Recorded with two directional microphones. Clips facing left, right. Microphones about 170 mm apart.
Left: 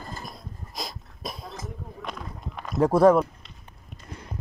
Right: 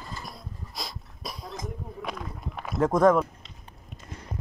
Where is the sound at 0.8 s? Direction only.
20° left (ahead or behind).